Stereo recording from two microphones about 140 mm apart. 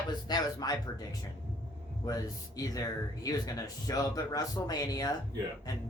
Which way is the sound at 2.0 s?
25° left (ahead or behind).